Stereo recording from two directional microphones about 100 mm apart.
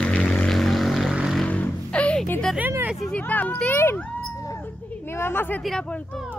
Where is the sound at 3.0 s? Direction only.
15° left (ahead or behind).